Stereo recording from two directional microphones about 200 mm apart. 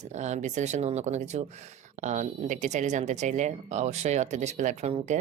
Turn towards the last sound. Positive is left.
turn(degrees=-35)  # may be behind; listen again after turning